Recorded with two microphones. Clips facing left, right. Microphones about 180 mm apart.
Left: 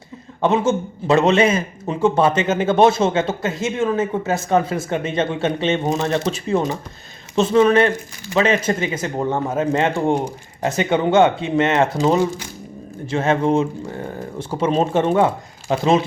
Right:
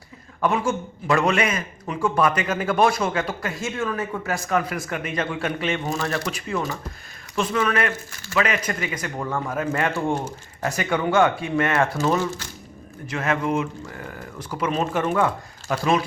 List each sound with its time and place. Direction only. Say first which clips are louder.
0.4 s a man's voice: left 5 dB; 25° left (ahead or behind)
13.1 s a man's voice: left 6 dB; 25° left (ahead or behind)